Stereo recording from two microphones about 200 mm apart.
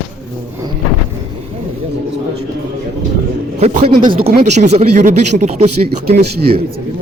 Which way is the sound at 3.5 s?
35° right (ahead or behind).